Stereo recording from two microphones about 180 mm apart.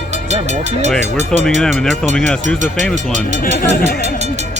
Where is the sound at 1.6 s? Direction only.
Centre (ahead or behind).